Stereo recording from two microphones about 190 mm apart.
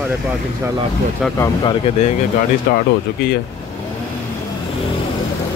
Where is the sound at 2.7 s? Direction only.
50° left (ahead or behind).